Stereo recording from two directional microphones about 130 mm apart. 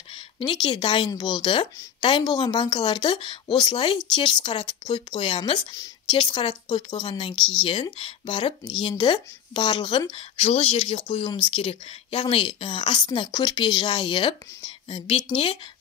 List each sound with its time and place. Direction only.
0.1 s speech: 40° left (ahead or behind)
10.4 s speech: 50° left (ahead or behind)